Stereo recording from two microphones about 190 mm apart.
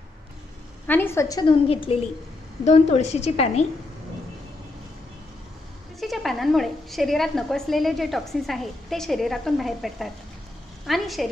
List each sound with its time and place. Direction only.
0.8 s a woman's voice: 10° left (ahead or behind)
1.4 s a woman's voice: 25° left (ahead or behind)
5.9 s a woman's voice: centre (ahead or behind)